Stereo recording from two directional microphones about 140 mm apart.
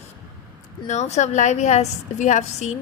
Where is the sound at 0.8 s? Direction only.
55° left (ahead or behind).